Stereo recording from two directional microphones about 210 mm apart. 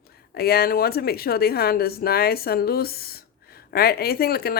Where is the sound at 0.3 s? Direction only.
45° left (ahead or behind).